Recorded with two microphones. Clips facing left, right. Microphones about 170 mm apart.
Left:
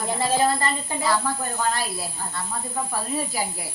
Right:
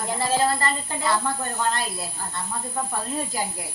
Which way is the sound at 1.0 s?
Centre (ahead or behind).